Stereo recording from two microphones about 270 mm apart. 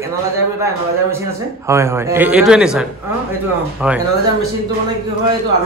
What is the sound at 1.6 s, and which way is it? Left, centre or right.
A man's voice, centre.